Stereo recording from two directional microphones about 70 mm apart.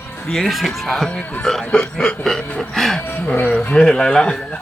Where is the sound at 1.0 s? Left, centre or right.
Centre.